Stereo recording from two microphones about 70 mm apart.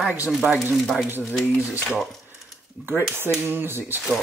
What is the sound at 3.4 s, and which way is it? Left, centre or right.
Speech, right.